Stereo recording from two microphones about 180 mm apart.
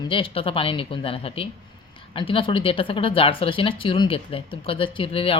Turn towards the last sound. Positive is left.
turn(degrees=30)  # may be behind; listen again after turning